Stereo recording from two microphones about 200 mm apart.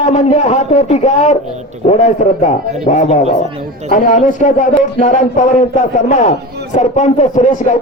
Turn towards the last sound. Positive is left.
turn(degrees=35)  # may be behind; listen again after turning